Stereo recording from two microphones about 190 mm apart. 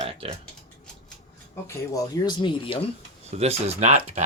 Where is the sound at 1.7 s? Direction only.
15° left (ahead or behind).